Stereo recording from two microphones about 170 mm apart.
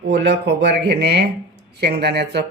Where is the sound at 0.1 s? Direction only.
90° right.